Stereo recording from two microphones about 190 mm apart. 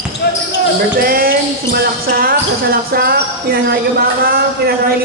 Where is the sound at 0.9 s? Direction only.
50° right (ahead or behind).